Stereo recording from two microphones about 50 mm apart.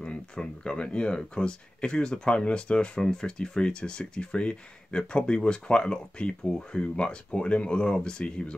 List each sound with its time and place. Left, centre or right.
0.0 s speech: centre